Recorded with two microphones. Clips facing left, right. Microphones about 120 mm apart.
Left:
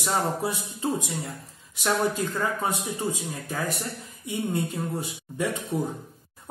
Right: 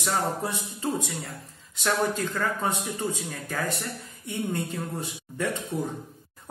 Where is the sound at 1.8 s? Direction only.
10° left (ahead or behind).